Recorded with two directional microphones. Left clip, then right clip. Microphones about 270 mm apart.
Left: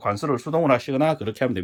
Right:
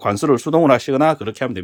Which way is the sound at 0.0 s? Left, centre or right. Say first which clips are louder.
Right 7 dB; right.